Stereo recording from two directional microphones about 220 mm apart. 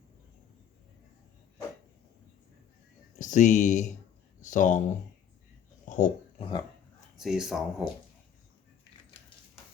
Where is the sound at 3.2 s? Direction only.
35° left (ahead or behind).